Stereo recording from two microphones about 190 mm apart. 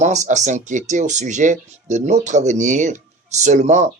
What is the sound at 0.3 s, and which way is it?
Speech, 40° right (ahead or behind).